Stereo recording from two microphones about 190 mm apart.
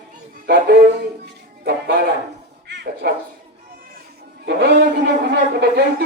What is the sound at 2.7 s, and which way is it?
Dog, 65° right (ahead or behind).